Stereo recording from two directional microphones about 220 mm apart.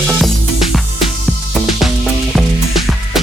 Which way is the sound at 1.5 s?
Centre (ahead or behind).